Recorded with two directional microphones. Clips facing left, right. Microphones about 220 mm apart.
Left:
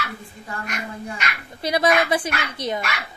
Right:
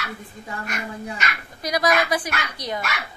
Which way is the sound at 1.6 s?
30° left (ahead or behind).